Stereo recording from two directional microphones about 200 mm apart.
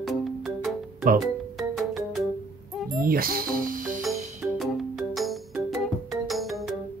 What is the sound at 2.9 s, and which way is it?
Speech, 45° right (ahead or behind).